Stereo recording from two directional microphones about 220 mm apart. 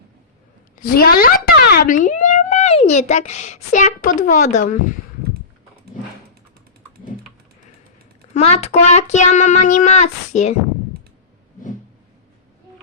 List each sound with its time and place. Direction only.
0.8 s speech: 45° left (ahead or behind)
8.3 s speech: 30° left (ahead or behind)